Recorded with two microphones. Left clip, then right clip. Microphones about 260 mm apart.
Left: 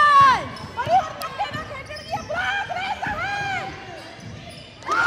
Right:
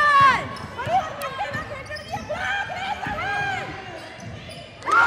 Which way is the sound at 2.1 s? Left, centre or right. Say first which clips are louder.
Left 2 dB; left.